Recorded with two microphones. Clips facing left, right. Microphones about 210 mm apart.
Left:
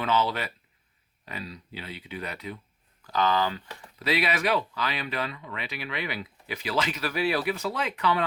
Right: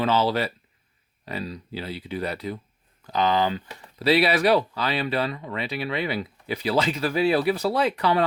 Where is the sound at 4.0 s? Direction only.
35° right (ahead or behind).